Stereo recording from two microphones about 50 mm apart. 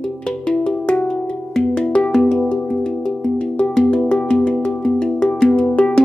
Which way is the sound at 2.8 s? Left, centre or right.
Centre.